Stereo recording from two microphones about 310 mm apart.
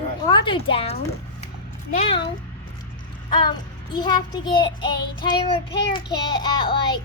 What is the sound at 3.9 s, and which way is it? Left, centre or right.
Child singing, centre.